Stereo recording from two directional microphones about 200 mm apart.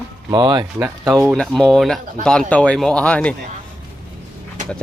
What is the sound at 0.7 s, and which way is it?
Speech, 10° right (ahead or behind).